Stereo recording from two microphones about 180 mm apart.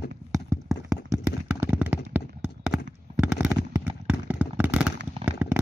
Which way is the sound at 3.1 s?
5° right (ahead or behind).